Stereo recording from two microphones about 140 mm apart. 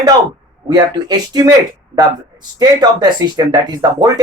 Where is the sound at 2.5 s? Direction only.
30° right (ahead or behind).